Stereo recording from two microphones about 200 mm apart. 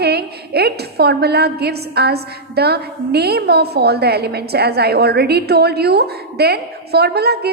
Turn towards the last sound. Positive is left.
turn(degrees=-55)  # may be behind; listen again after turning